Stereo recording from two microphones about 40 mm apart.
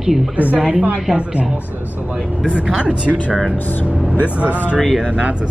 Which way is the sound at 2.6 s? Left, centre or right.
Right.